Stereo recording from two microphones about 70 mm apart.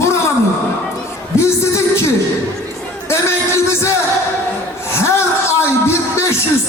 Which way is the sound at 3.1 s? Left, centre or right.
Left.